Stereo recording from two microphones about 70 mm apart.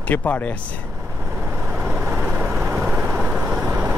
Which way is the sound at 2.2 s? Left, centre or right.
Right.